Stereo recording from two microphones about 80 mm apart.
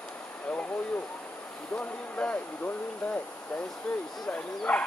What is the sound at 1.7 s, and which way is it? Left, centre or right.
A child's voice, centre.